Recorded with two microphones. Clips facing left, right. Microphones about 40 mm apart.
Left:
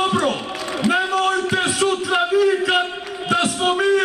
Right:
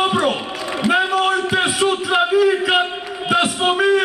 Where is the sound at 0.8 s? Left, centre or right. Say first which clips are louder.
Right 2 dB; centre.